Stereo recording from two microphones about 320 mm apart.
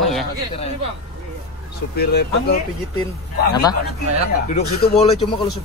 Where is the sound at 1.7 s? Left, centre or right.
Left.